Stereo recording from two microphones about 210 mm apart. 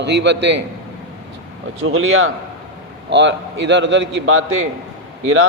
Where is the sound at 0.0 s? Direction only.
55° right (ahead or behind).